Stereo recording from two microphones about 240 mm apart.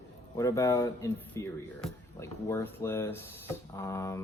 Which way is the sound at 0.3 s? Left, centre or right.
Centre.